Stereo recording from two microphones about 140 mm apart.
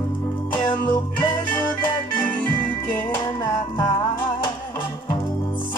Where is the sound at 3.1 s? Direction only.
35° left (ahead or behind).